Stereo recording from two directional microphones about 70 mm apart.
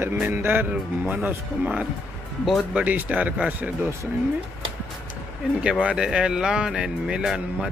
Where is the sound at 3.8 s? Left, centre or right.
Right.